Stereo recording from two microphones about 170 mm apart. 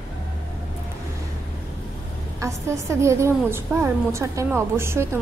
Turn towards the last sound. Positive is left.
turn(degrees=-15)  # may be behind; listen again after turning